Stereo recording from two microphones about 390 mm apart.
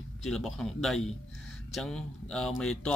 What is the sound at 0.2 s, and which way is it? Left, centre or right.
A man's voice, centre.